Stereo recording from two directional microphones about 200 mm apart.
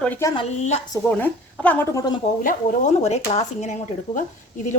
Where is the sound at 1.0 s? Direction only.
5° left (ahead or behind).